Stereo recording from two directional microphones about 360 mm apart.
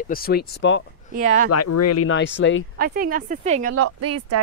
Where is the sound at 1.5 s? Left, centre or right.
Left.